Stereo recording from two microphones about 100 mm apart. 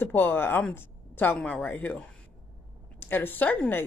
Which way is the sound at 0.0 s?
20° left (ahead or behind).